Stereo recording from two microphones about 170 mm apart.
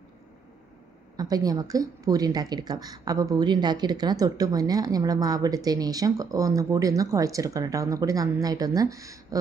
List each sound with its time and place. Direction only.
1.1 s speech: 20° right (ahead or behind)